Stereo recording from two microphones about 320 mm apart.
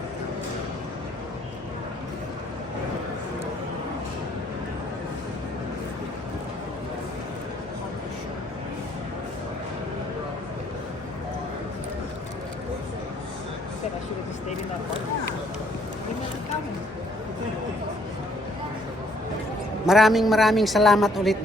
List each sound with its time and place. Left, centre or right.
19.8 s a man's voice: centre